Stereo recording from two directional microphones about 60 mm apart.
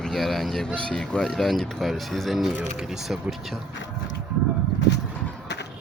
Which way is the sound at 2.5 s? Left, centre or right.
Right.